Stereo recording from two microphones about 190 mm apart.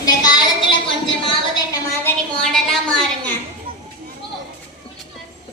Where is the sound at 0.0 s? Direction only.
20° left (ahead or behind).